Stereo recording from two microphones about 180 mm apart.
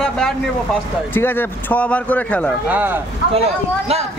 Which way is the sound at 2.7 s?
10° right (ahead or behind).